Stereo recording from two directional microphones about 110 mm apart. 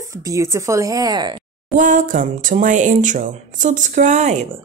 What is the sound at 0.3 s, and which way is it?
Speech, 25° right (ahead or behind).